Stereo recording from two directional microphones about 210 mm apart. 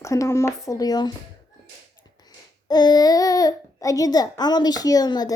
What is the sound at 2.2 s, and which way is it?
A child's voice, 20° left (ahead or behind).